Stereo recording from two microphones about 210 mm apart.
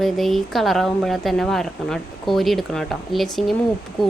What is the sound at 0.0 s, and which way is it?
A woman's voice, centre (ahead or behind).